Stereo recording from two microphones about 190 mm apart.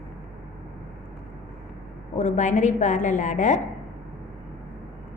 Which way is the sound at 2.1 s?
35° left (ahead or behind).